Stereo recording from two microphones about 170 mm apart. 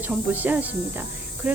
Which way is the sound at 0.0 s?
10° right (ahead or behind).